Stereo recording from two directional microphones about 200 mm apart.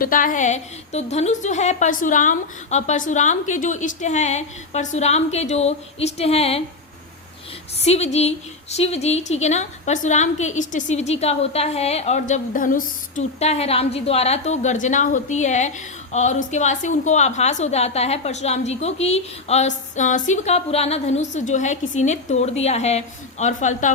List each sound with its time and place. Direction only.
0.0 s a woman's voice: 45° left (ahead or behind)
7.9 s a woman's voice: 30° left (ahead or behind)